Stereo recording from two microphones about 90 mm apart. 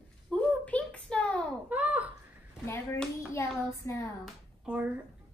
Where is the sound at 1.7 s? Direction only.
15° right (ahead or behind).